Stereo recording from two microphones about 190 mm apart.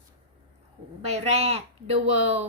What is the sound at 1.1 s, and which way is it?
Speech, 35° right (ahead or behind).